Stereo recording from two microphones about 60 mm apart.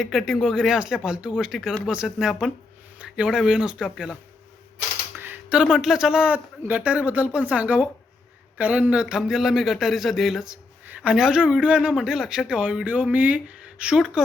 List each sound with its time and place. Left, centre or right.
0.0 s speech: centre
1.5 s speech: centre
5.1 s a sound: right
5.7 s a woman's voice: centre
10.8 s a sound: right
11.1 s speech: centre